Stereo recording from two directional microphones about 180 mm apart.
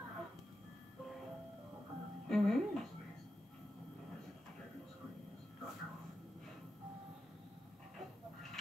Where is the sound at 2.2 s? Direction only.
Centre (ahead or behind).